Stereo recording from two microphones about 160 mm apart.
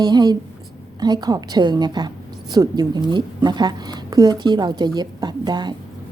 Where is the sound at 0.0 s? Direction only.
25° right (ahead or behind).